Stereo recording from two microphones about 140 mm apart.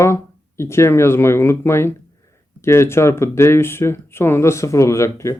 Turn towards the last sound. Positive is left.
turn(degrees=20)  # may be behind; listen again after turning